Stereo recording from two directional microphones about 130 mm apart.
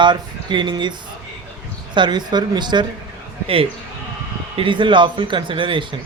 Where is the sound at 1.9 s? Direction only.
35° right (ahead or behind).